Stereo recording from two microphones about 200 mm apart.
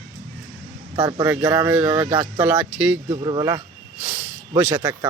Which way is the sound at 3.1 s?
25° right (ahead or behind).